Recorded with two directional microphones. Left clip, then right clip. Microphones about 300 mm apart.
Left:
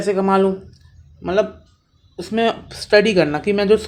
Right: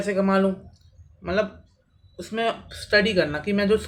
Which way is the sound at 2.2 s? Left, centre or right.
Centre.